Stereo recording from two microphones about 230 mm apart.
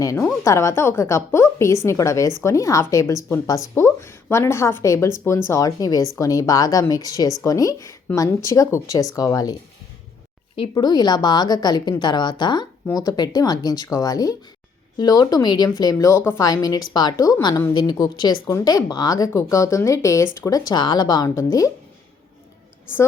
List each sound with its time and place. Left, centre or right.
0.0 s a woman's voice: centre